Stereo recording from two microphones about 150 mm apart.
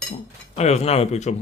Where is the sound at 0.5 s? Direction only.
45° left (ahead or behind).